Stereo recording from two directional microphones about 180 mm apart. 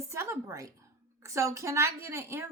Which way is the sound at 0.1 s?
15° right (ahead or behind).